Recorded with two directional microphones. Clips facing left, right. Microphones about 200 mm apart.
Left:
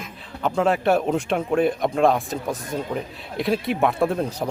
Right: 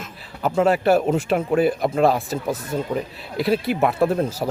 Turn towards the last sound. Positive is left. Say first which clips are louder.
# right 2 dB
turn(degrees=0)  # may be behind; listen again after turning